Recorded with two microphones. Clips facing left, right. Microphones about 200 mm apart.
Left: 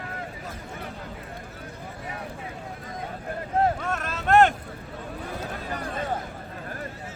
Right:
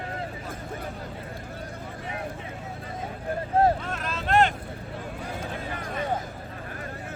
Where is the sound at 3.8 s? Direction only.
45° left (ahead or behind).